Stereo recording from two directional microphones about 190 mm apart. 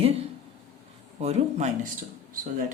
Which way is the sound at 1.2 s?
35° right (ahead or behind).